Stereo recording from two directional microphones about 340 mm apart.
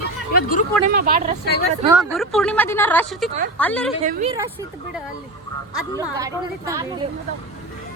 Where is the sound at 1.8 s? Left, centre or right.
Centre.